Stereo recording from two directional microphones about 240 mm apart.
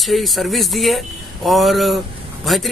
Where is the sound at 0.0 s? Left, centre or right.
Centre.